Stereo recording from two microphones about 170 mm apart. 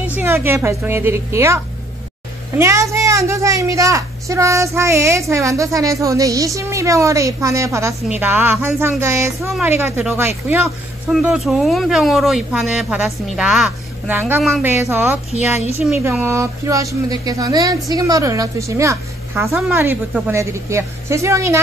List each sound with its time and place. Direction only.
0.1 s a woman's voice: 15° right (ahead or behind)
2.6 s a woman's voice: 15° right (ahead or behind)
11.1 s a woman's voice: centre (ahead or behind); by 21.5 s 15° right (ahead or behind)